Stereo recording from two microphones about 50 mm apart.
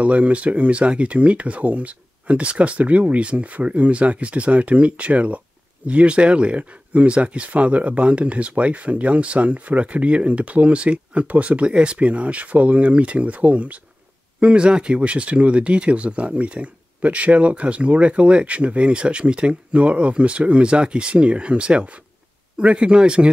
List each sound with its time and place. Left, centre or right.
0.0 s speech: right